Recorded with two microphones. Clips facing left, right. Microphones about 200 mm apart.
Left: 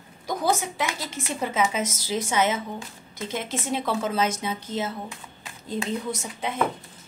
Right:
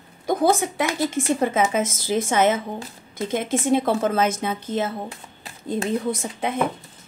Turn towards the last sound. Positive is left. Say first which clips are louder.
# right 5 dB
turn(degrees=-55)  # may be behind; listen again after turning